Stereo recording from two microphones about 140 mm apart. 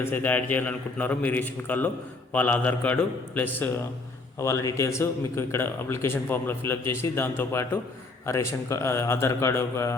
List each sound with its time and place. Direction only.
0.0 s a man's voice: 15° left (ahead or behind)